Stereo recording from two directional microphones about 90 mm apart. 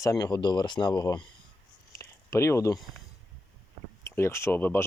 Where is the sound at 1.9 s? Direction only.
35° left (ahead or behind).